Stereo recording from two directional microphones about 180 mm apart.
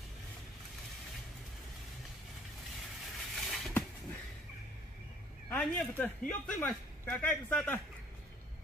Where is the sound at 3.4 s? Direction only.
Centre (ahead or behind).